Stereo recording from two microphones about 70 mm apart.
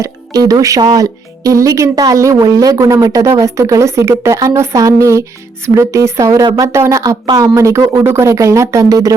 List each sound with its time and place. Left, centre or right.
0.3 s a woman's voice: right
7.3 s a woman's voice: right